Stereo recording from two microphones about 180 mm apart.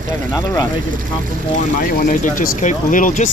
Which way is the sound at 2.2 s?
45° left (ahead or behind).